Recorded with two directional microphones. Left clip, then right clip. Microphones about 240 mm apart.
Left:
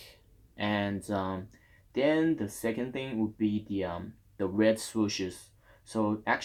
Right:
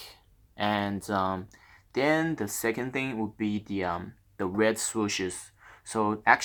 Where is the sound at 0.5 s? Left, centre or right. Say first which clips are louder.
Right 3 dB; centre.